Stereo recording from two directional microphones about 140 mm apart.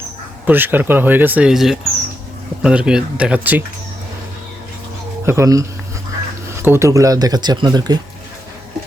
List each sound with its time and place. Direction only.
0.4 s speech: 15° right (ahead or behind)
5.2 s speech: 20° right (ahead or behind)